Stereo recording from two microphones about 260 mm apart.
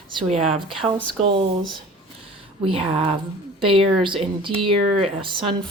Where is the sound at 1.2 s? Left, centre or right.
Centre.